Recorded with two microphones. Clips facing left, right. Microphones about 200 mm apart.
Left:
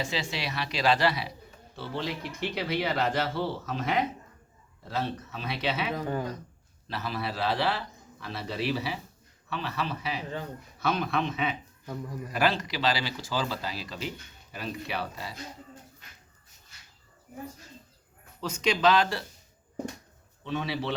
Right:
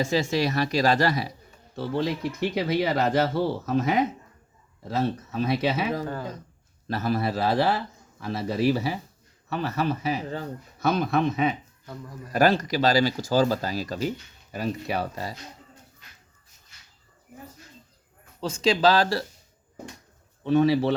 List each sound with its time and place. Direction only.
0.0 s speech: 45° right (ahead or behind)
18.7 s speech: 30° right (ahead or behind)
20.4 s speech: 45° right (ahead or behind)